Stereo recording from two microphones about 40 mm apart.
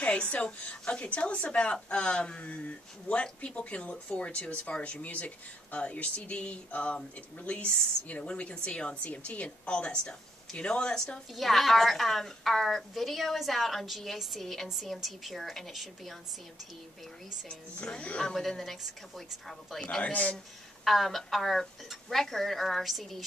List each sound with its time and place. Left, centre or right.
0.0 s a woman's voice: left
11.3 s a woman's voice: centre
18.2 s a woman's voice: centre
20.0 s a woman's voice: left
20.8 s a woman's voice: centre